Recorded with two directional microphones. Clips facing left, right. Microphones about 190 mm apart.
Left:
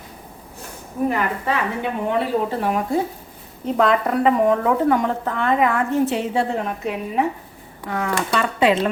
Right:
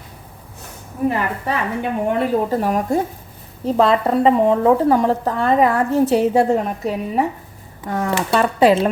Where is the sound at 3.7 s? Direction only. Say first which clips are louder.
Right 3 dB; 30° right (ahead or behind).